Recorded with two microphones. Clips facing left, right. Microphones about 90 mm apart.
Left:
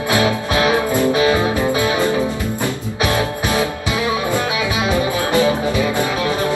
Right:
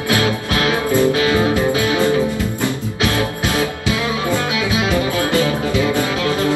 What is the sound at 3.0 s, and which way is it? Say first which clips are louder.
Music: left 1 dB; 20° left (ahead or behind).